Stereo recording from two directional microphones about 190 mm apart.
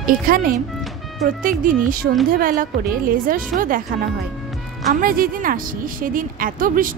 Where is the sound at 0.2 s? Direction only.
50° right (ahead or behind).